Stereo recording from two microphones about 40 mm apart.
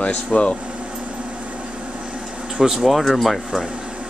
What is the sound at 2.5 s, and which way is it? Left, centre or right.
Speech, centre.